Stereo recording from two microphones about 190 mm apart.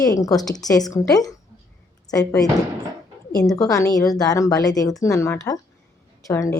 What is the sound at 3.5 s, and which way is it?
A woman's voice, 20° left (ahead or behind).